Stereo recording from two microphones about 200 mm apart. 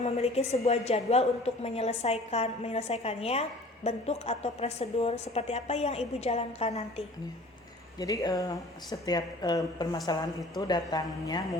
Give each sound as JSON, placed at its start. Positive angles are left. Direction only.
{"t": 0.0, "sound": "a woman's voice", "side_deg": 30}
{"t": 7.9, "sound": "speech", "side_deg": 20}